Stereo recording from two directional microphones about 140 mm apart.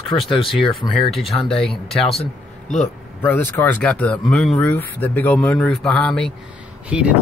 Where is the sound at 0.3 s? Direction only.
40° left (ahead or behind).